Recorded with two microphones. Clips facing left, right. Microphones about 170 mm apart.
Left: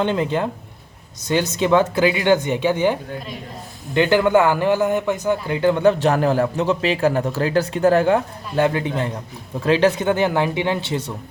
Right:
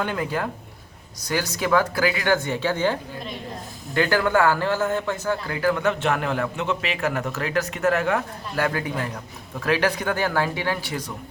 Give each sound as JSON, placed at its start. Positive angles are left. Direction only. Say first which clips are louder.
{"t": 0.0, "sound": "a man's voice", "louder": "left 6 dB", "side_deg": 25}